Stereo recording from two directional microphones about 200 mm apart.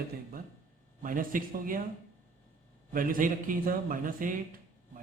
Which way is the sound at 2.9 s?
45° right (ahead or behind).